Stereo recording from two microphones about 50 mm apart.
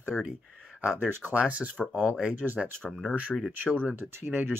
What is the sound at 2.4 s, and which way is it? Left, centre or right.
Speech, right.